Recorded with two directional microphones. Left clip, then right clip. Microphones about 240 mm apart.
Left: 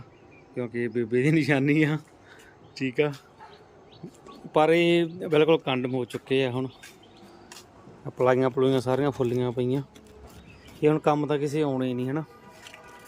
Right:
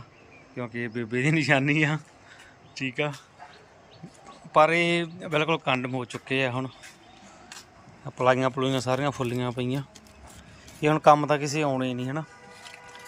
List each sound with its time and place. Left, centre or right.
0.5 s speech: centre
4.5 s speech: centre
8.0 s speech: centre